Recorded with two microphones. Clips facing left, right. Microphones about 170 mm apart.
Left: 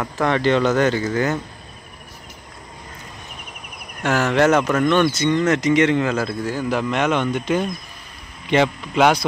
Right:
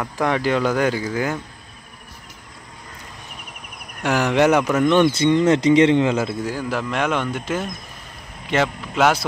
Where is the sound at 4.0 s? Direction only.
15° right (ahead or behind).